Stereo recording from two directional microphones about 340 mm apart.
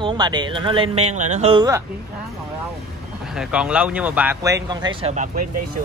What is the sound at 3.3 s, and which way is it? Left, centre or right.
Speech, centre.